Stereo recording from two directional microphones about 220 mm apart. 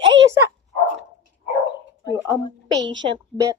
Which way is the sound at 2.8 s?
55° right (ahead or behind).